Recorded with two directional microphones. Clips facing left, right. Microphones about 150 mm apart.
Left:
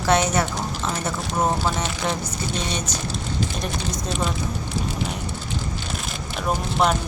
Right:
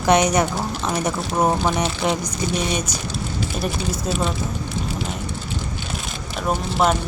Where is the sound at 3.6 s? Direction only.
5° right (ahead or behind).